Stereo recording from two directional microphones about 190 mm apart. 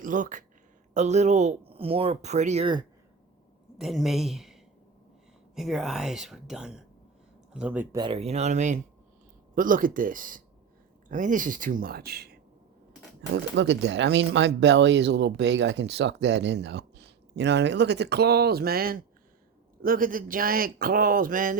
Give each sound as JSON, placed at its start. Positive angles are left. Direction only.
{"t": 0.0, "sound": "a man's voice", "side_deg": -45}
{"t": 3.8, "sound": "speech", "side_deg": 0}
{"t": 7.9, "sound": "a man's voice", "side_deg": -25}
{"t": 13.3, "sound": "a man's voice", "side_deg": -70}